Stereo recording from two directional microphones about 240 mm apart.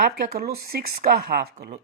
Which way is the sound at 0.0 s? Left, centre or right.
Right.